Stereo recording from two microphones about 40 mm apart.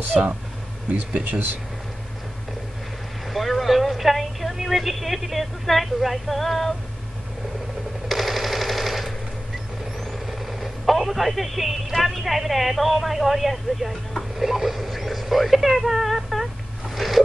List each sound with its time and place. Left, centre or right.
0.1 s speech: right
3.3 s a woman's voice: centre
8.1 s machine gun: centre
9.9 s speech: centre
16.9 s a sound: centre